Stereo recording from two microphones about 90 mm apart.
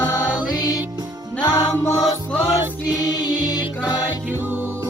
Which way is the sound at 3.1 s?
50° left (ahead or behind).